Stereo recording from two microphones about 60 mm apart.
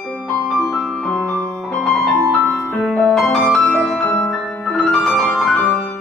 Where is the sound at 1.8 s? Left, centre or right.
Centre.